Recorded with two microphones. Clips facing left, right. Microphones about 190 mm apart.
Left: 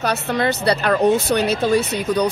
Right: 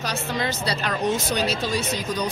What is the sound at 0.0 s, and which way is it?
Speech, 65° left (ahead or behind).